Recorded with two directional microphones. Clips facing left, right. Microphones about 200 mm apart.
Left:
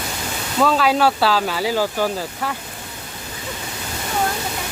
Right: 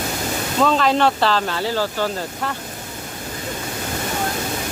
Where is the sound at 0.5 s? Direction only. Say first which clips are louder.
Even; 5° left (ahead or behind).